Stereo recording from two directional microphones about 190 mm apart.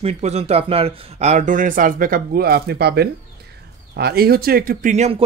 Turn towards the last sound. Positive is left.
turn(degrees=-35)  # may be behind; listen again after turning